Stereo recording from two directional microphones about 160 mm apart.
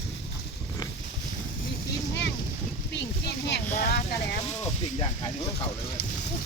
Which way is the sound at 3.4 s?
70° left (ahead or behind).